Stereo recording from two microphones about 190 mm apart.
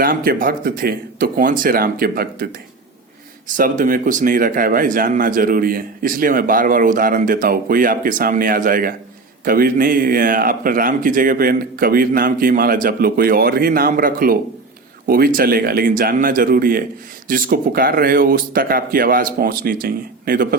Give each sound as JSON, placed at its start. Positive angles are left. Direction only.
{"t": 0.0, "sound": "speech", "side_deg": -50}
{"t": 3.6, "sound": "speech", "side_deg": -45}